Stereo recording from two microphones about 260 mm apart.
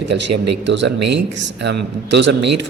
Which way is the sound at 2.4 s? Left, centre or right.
Right.